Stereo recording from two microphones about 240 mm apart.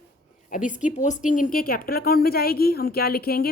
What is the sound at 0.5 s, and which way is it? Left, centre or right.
A woman's voice, left.